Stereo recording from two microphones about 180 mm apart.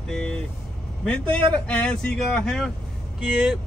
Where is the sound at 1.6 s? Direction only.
5° left (ahead or behind).